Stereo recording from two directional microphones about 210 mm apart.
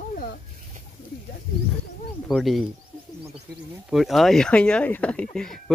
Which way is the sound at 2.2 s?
Centre (ahead or behind).